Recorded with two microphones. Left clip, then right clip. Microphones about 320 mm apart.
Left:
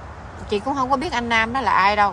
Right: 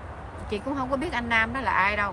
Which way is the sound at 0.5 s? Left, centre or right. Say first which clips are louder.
Left 8 dB; centre.